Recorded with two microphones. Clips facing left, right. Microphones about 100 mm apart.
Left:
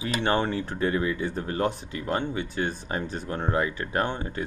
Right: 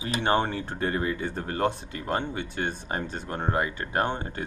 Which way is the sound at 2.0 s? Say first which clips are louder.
Left 1 dB; 30° right (ahead or behind).